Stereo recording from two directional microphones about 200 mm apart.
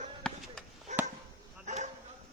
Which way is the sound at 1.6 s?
35° right (ahead or behind).